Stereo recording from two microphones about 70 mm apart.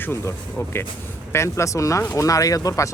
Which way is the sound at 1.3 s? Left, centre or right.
Left.